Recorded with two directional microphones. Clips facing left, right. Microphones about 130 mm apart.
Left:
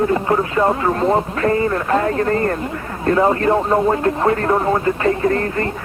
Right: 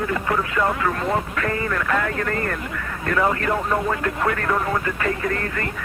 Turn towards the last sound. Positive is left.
turn(degrees=30)  # may be behind; listen again after turning